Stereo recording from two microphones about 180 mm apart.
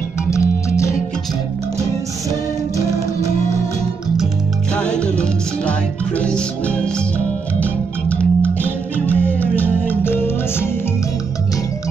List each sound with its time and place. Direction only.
0.3 s music: 15° left (ahead or behind)
4.7 s music: 5° left (ahead or behind)